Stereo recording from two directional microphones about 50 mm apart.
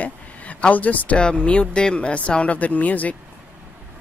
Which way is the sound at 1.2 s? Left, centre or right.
Left.